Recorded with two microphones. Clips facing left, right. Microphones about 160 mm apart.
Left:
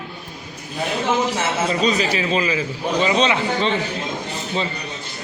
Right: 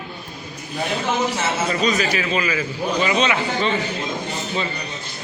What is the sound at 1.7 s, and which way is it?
A man's voice, 30° left (ahead or behind).